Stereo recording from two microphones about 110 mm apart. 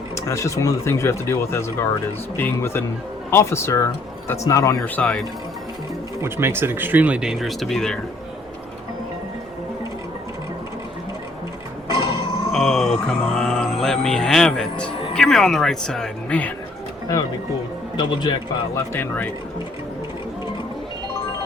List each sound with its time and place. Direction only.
0.3 s speech: 25° left (ahead or behind)
4.9 s speech: 10° left (ahead or behind)
6.2 s speech: 20° right (ahead or behind); by 7.9 s 5° left (ahead or behind)
11.9 s grunt: 50° left (ahead or behind)
12.5 s speech: 5° left (ahead or behind)
17.9 s speech: 40° left (ahead or behind)
18.8 s speech: 15° left (ahead or behind)